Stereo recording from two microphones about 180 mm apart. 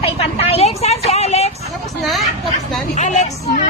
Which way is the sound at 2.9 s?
40° left (ahead or behind).